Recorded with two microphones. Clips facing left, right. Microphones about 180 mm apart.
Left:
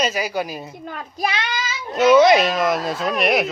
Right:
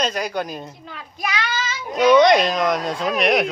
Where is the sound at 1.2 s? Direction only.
30° left (ahead or behind).